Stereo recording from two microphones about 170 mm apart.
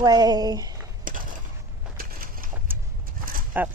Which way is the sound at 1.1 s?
55° right (ahead or behind).